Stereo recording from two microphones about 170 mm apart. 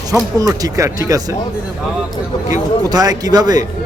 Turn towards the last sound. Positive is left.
turn(degrees=-25)  # may be behind; listen again after turning